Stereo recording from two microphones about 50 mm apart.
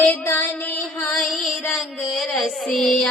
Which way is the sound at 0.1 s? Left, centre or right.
Left.